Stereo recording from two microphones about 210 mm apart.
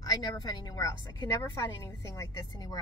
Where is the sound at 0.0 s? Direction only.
20° left (ahead or behind).